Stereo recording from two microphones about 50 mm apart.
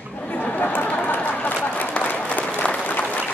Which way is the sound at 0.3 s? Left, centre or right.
Left.